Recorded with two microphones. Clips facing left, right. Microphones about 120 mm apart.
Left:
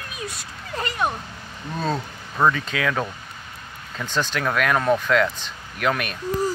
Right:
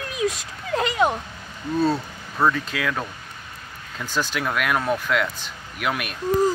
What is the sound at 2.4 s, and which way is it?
Speech, centre (ahead or behind).